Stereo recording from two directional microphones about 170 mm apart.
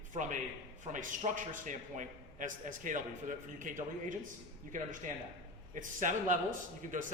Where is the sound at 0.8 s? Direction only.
50° right (ahead or behind).